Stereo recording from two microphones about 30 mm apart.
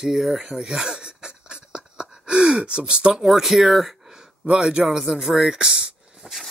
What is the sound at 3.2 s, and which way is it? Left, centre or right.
Speech, centre.